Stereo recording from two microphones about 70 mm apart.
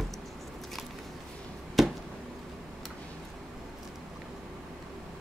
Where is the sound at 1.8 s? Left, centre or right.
Centre.